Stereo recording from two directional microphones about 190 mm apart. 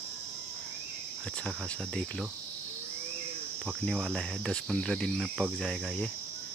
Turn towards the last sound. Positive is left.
turn(degrees=0)  # may be behind; listen again after turning